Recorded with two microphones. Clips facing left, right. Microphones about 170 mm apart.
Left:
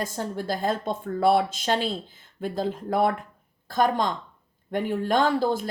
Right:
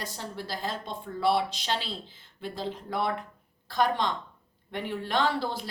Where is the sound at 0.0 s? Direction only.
50° left (ahead or behind).